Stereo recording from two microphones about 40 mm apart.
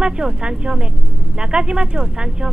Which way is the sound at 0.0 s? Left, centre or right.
Right.